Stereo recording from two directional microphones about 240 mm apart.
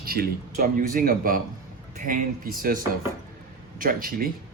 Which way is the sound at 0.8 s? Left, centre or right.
Right.